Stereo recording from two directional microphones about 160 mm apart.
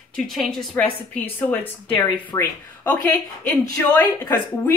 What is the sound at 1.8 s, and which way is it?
Speech, 35° left (ahead or behind).